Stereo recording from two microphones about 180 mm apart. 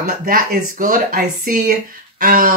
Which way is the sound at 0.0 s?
50° right (ahead or behind).